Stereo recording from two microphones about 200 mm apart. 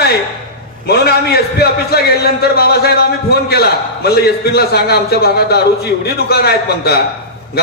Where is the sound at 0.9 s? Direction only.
50° left (ahead or behind).